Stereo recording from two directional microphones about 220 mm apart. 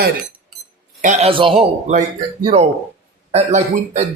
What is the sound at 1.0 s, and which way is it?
A man's voice, 25° right (ahead or behind).